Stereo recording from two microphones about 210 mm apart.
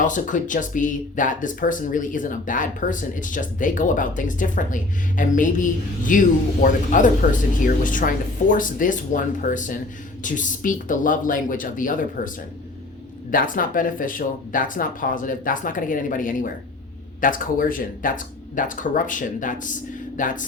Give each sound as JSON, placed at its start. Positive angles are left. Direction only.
{"t": 0.0, "sound": "speech", "side_deg": 40}
{"t": 13.3, "sound": "speech", "side_deg": 40}